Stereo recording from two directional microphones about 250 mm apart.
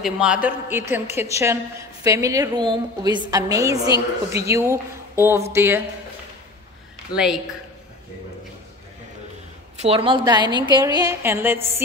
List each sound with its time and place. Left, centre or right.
0.0 s a woman's voice: centre
7.1 s speech: centre
9.8 s a woman's voice: right